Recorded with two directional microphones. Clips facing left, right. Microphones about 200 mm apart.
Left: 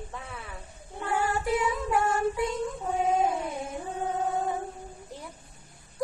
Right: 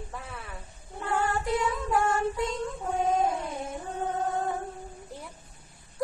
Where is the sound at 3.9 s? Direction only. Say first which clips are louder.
Even; centre (ahead or behind).